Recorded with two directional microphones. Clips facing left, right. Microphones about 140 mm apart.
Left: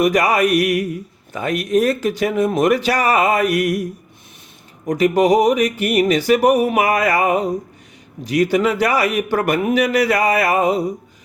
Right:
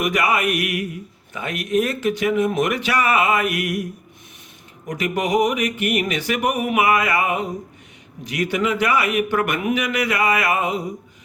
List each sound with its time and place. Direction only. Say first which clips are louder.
0.0 s speech: left 5 dB; 35° left (ahead or behind)
4.9 s speech: left 8 dB; 35° left (ahead or behind)